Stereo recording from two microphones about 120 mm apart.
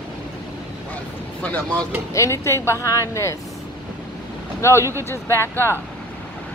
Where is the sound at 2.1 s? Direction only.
25° left (ahead or behind).